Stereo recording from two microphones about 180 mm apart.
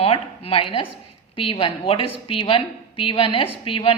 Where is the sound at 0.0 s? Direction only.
30° left (ahead or behind).